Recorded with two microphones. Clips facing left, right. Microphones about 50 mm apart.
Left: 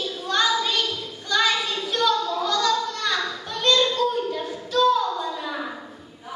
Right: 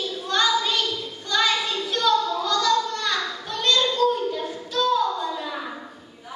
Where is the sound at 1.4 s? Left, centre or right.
Centre.